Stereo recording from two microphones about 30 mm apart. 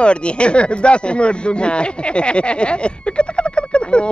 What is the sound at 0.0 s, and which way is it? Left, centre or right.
Speech, left.